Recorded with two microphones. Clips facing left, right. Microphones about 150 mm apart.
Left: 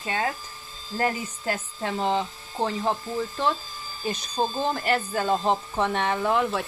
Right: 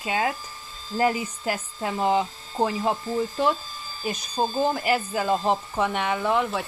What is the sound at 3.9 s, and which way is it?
Speech, centre (ahead or behind).